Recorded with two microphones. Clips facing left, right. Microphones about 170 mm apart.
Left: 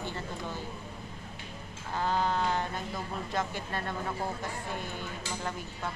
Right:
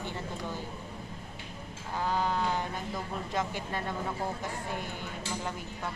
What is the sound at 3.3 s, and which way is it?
Speech, 15° right (ahead or behind).